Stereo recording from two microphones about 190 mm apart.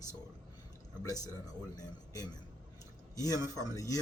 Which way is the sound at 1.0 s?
20° left (ahead or behind).